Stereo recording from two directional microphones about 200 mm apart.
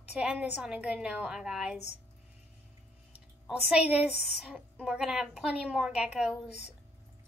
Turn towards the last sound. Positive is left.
turn(degrees=-5)  # may be behind; listen again after turning